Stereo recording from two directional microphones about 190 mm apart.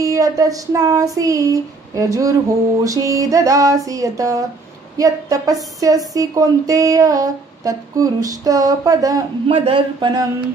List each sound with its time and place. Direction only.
0.0 s female singing: 15° right (ahead or behind)
4.9 s a woman's voice: 20° right (ahead or behind)